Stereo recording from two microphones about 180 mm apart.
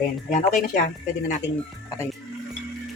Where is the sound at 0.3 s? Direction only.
45° left (ahead or behind).